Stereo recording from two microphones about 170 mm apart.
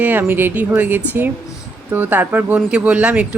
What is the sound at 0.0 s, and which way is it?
Speech, 10° right (ahead or behind).